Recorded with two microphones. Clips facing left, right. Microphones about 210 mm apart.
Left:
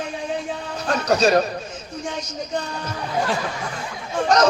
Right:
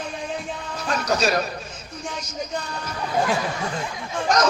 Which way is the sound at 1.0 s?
35° left (ahead or behind).